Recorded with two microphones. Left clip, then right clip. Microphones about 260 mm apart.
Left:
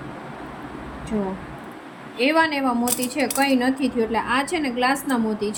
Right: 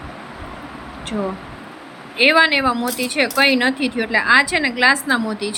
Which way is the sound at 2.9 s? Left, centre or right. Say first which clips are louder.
Right 4 dB; centre.